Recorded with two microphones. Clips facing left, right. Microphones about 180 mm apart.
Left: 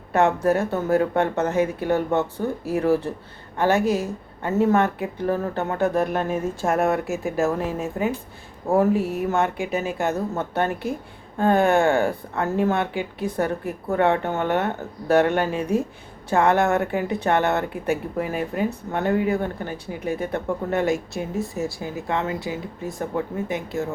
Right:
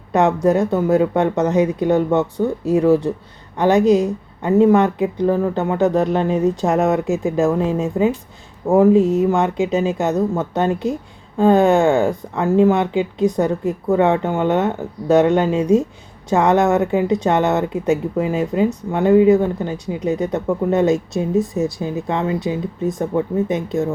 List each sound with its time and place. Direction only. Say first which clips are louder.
0.1 s speech: right 4 dB; 15° right (ahead or behind)